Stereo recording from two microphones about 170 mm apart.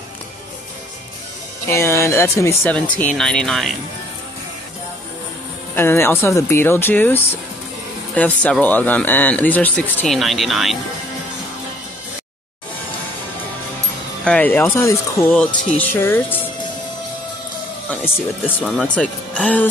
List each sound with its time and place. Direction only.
1.7 s speech: 15° left (ahead or behind)
5.8 s speech: 15° left (ahead or behind)
14.2 s speech: 10° left (ahead or behind)
18.6 s speech: centre (ahead or behind)